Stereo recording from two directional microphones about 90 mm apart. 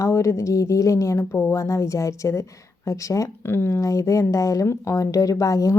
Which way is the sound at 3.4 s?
25° left (ahead or behind).